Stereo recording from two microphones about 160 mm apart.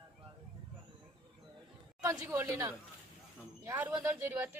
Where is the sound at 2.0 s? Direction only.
20° right (ahead or behind).